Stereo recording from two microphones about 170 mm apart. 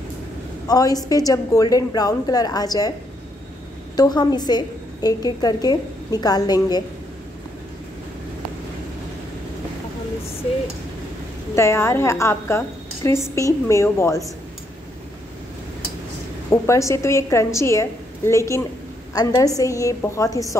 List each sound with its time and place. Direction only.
0.7 s a woman's voice: 20° left (ahead or behind)
3.9 s a woman's voice: 25° left (ahead or behind)
11.5 s a woman's voice: 15° left (ahead or behind)
16.4 s a woman's voice: 15° left (ahead or behind)